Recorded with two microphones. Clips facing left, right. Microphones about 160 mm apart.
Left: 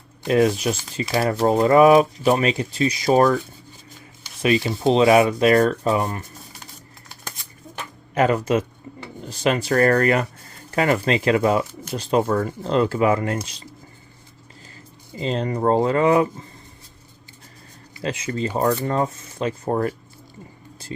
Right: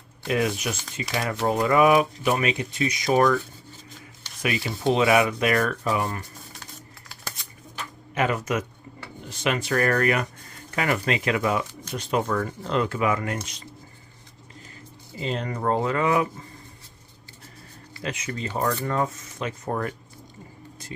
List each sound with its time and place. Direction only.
0.3 s speech: 35° left (ahead or behind)
4.4 s speech: 25° left (ahead or behind)
8.1 s speech: 35° left (ahead or behind)
15.1 s speech: 35° left (ahead or behind)
18.0 s speech: 30° left (ahead or behind)